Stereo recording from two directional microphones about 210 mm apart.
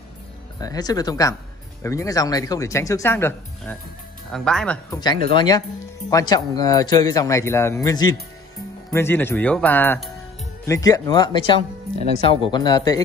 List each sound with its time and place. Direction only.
0.6 s speech: 20° left (ahead or behind); by 4.7 s 5° left (ahead or behind)
4.9 s speech: 20° left (ahead or behind)